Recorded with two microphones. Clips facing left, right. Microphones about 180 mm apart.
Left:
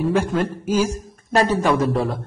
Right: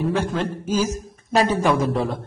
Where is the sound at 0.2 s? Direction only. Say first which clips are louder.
Left 2 dB; 10° left (ahead or behind).